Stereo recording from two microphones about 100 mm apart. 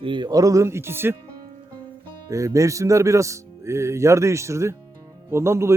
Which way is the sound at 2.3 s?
35° right (ahead or behind).